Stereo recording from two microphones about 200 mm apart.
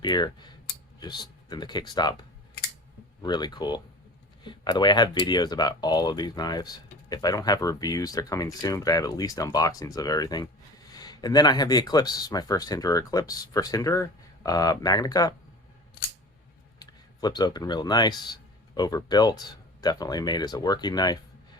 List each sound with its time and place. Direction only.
0.0 s speech: 20° left (ahead or behind)
3.2 s speech: 20° left (ahead or behind)
16.8 s speech: 20° left (ahead or behind)